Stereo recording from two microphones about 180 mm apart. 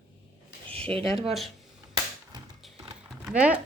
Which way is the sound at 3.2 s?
5° right (ahead or behind).